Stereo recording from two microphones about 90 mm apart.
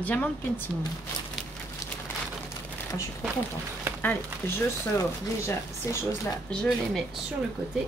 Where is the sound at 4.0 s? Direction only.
25° left (ahead or behind).